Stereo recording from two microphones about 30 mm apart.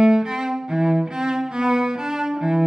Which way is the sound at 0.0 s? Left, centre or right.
Centre.